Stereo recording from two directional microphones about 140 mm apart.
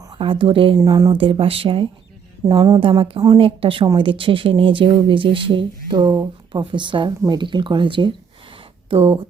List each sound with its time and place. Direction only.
0.2 s speech: 40° right (ahead or behind)
0.8 s speech: 25° right (ahead or behind)
6.5 s speech: 35° right (ahead or behind)